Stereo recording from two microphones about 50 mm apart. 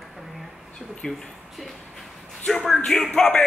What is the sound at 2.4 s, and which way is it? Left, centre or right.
Speech, centre.